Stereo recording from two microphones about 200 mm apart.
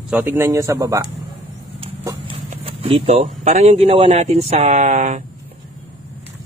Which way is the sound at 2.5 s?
30° right (ahead or behind).